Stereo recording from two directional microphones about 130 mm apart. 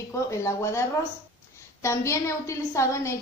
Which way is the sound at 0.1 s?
20° left (ahead or behind).